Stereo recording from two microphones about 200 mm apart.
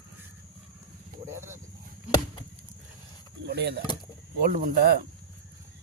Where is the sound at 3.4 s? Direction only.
55° right (ahead or behind).